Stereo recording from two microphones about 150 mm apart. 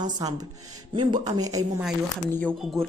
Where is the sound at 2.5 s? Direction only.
Centre (ahead or behind).